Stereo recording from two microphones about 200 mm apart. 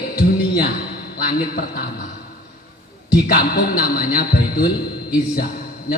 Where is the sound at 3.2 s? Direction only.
50° left (ahead or behind).